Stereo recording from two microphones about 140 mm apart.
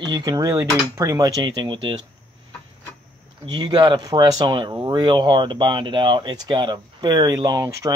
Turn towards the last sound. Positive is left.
turn(degrees=-25)  # may be behind; listen again after turning